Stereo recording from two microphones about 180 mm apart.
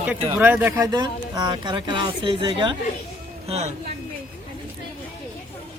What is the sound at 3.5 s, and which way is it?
Speech, 35° right (ahead or behind).